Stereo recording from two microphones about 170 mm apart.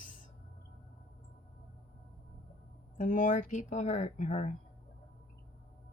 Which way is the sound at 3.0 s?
50° left (ahead or behind).